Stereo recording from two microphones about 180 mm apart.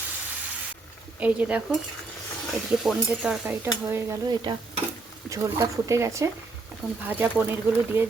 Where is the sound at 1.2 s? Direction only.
5° right (ahead or behind).